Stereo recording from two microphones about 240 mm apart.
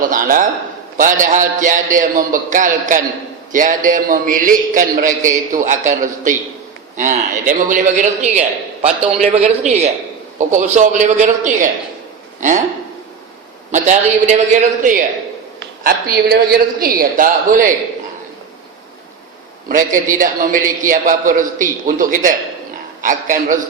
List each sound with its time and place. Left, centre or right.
0.0 s a man's voice: right
13.7 s a man's voice: right
19.6 s a man's voice: right